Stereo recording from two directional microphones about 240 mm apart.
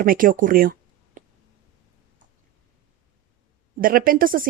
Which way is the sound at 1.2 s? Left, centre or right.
Right.